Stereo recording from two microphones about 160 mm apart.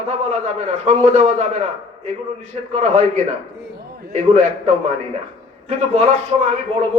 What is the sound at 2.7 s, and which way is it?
A man's voice, 45° right (ahead or behind).